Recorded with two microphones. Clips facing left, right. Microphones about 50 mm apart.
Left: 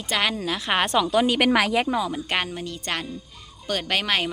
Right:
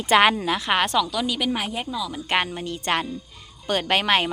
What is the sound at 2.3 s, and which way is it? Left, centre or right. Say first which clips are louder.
Speech: right 3 dB; centre.